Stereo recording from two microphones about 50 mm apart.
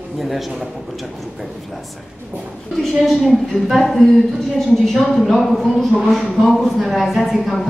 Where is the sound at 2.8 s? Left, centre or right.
Centre.